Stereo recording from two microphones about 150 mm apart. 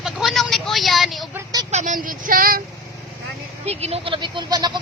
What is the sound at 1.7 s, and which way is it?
Speech, 50° right (ahead or behind).